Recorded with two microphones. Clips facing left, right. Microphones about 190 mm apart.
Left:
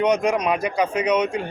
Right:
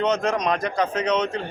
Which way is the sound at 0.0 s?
10° left (ahead or behind).